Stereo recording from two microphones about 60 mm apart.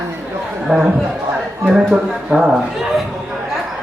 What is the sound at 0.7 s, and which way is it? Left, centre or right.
Speech, centre.